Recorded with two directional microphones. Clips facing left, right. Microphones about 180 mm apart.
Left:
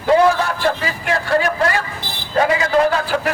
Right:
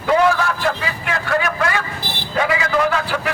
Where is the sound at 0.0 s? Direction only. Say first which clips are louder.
Left 2 dB; 30° left (ahead or behind).